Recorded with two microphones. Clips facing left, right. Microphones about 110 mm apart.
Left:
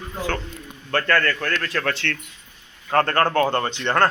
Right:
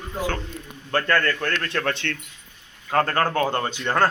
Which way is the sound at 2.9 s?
10° right (ahead or behind).